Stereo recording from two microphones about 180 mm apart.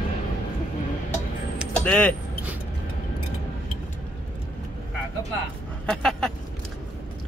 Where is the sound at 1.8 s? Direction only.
5° left (ahead or behind).